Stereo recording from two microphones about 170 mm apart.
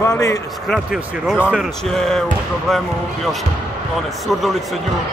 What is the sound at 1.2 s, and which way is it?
Speech, 5° right (ahead or behind).